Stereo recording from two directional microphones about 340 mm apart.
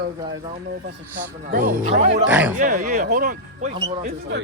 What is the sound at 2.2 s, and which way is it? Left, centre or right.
Speech, centre.